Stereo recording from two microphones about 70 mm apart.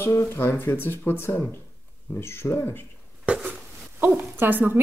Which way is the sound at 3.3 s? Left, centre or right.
Centre.